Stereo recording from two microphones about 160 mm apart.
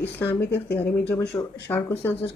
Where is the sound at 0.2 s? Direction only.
15° left (ahead or behind).